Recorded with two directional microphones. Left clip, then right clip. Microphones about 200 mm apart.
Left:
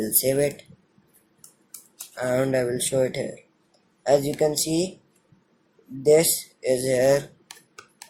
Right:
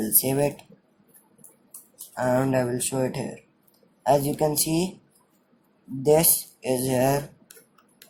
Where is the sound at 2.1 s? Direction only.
20° right (ahead or behind).